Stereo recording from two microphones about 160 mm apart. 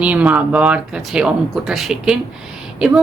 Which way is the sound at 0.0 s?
10° right (ahead or behind).